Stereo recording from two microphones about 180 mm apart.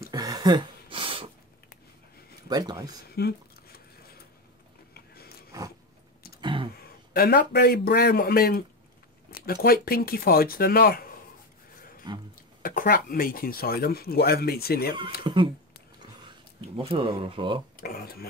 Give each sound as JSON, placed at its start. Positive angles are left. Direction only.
{"t": 0.1, "sound": "a sound", "side_deg": -20}
{"t": 2.5, "sound": "speech", "side_deg": -20}
{"t": 3.2, "sound": "a sound", "side_deg": 60}
{"t": 6.4, "sound": "a sound", "side_deg": -30}
{"t": 6.7, "sound": "a man's voice", "side_deg": 60}
{"t": 12.1, "sound": "speech", "side_deg": -25}
{"t": 12.6, "sound": "speech", "side_deg": 55}
{"t": 15.2, "sound": "speech", "side_deg": -30}
{"t": 17.7, "sound": "speech", "side_deg": 55}